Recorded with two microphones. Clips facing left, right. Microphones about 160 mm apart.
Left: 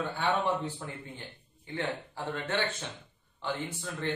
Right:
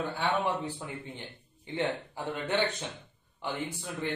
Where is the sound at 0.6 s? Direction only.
20° right (ahead or behind).